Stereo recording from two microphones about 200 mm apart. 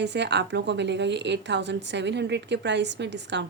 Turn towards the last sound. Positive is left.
turn(degrees=-60)  # may be behind; listen again after turning